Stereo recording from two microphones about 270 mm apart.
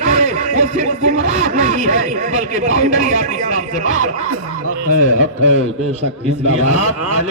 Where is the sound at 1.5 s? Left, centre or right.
Right.